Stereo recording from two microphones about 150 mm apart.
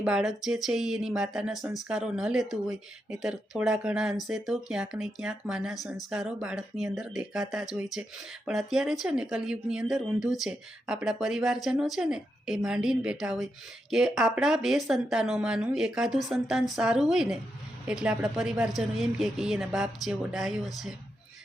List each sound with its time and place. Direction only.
0.0 s speech: 5° right (ahead or behind)